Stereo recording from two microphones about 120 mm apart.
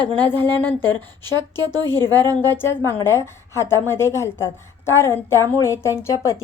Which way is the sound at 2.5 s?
20° left (ahead or behind).